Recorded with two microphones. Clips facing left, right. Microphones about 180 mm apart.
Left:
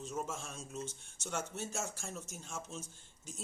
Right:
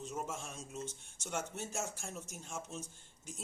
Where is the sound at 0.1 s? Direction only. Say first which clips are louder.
Left 2 dB; 15° right (ahead or behind).